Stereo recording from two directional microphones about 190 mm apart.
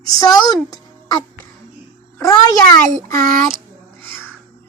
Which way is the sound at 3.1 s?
50° right (ahead or behind).